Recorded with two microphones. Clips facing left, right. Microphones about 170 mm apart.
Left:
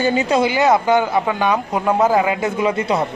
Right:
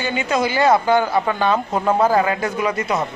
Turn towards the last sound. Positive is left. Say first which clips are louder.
# left 3 dB
turn(degrees=30)  # may be behind; listen again after turning